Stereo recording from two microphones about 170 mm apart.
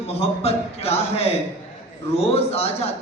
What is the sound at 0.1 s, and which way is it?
A man's voice, 35° left (ahead or behind).